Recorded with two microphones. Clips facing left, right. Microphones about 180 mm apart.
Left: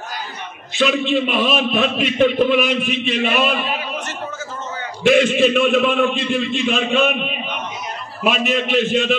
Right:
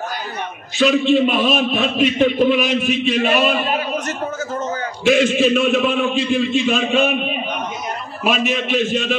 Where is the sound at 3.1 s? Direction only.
45° right (ahead or behind).